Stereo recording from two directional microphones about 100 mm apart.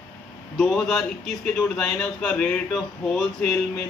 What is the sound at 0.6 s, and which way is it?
A man's voice, 5° left (ahead or behind).